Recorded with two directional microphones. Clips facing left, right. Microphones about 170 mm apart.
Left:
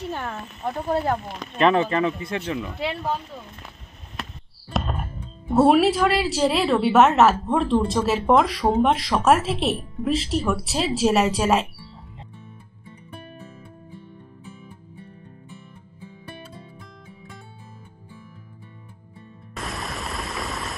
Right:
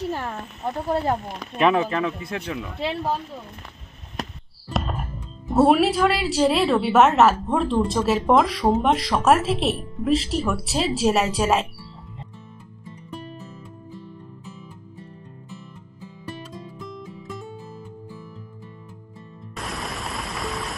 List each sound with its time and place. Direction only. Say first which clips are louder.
0.1 s speech: right 1 dB; 5° right (ahead or behind)
4.2 s basketball bounce: right 4 dB; 40° right (ahead or behind)
5.5 s speech: left 1 dB; centre (ahead or behind)
19.5 s music: even; centre (ahead or behind)